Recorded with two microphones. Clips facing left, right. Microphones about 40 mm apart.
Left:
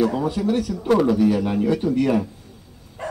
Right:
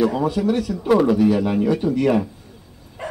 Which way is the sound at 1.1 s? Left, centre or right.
Right.